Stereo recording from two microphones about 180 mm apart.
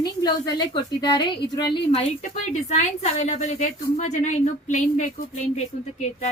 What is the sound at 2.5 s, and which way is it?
A woman's voice, 40° left (ahead or behind).